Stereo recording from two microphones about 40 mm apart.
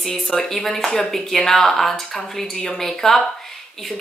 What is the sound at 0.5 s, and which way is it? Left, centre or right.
Speech, centre.